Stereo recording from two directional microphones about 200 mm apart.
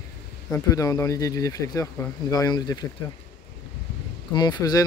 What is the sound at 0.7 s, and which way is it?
Speech, 15° left (ahead or behind).